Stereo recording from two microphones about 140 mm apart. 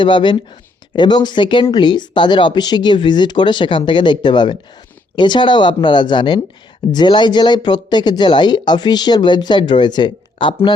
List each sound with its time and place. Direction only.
0.0 s speech: 35° left (ahead or behind)